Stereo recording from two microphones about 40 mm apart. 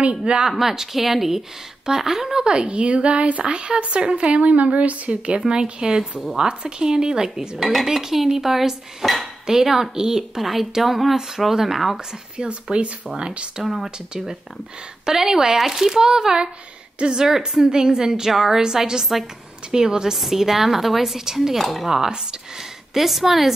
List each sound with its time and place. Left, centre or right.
0.2 s speech: centre
0.5 s speech: centre
2.4 s a woman's voice: right
5.5 s speech: centre
10.4 s speech: centre
12.0 s speech: centre
21.5 s speech: centre
22.6 s a woman's voice: centre